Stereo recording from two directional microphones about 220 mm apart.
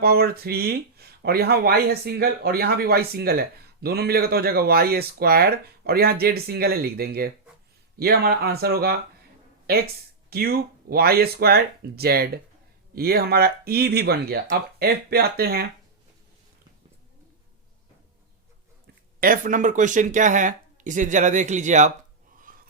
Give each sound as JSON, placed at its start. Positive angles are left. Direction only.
{"t": 0.0, "sound": "speech", "side_deg": -45}
{"t": 19.2, "sound": "speech", "side_deg": -40}
{"t": 22.5, "sound": "a sound", "side_deg": -40}